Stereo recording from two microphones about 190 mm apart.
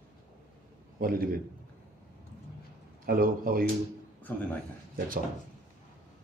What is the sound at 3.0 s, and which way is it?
Speech, 50° right (ahead or behind).